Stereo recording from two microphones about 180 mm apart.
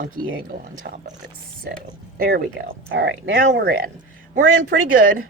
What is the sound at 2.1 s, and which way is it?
Speech, 55° right (ahead or behind).